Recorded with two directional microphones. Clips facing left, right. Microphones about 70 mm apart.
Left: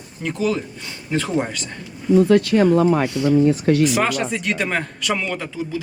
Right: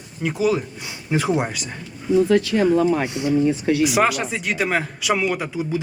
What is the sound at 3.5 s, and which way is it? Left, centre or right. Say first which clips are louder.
Speech: left 2 dB; left.